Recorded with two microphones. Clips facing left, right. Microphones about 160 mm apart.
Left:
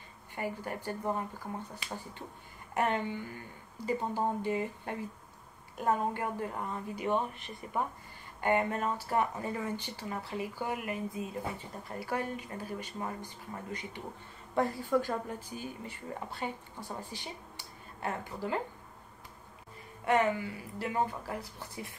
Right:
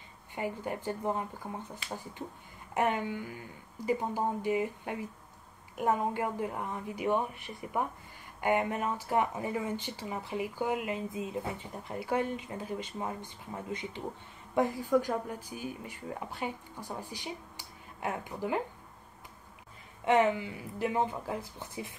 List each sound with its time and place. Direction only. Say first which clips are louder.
0.4 s speech: right 2 dB; 15° right (ahead or behind)
2.7 s speech: right 1 dB; 15° right (ahead or behind)
20.1 s speech: right 2 dB; 20° right (ahead or behind)